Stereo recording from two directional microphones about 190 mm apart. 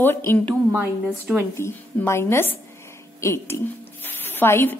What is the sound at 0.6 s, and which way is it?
Speech, 10° right (ahead or behind).